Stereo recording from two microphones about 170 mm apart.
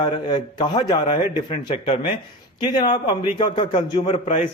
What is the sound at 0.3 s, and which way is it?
Speech, 25° left (ahead or behind).